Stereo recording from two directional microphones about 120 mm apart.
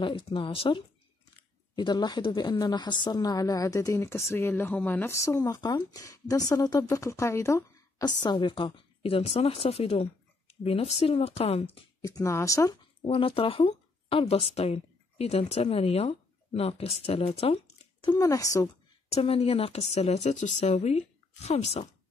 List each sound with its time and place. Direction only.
0.0 s a woman's voice: 45° left (ahead or behind); by 7.6 s 25° left (ahead or behind)
8.0 s a woman's voice: 35° left (ahead or behind); by 11.6 s 60° left (ahead or behind)
12.0 s speech: 30° left (ahead or behind)
13.0 s speech: 50° left (ahead or behind)
18.2 s speech: 30° left (ahead or behind)
19.1 s speech: 55° left (ahead or behind)